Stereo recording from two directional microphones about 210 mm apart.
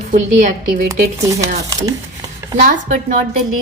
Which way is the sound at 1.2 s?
15° right (ahead or behind).